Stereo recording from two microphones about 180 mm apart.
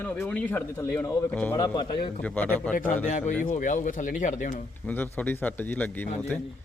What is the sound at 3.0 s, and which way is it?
Speech, 45° left (ahead or behind).